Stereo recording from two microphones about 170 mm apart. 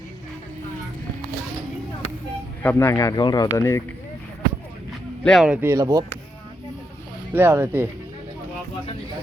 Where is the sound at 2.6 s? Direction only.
10° left (ahead or behind).